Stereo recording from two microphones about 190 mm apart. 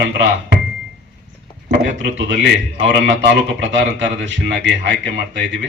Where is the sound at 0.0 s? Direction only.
65° right (ahead or behind).